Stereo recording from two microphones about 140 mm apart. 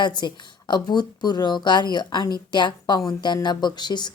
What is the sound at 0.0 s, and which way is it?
Speech, 30° left (ahead or behind).